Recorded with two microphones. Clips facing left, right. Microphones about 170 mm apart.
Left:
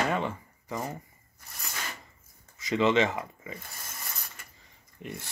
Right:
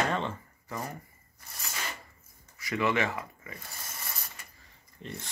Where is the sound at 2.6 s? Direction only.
20° left (ahead or behind).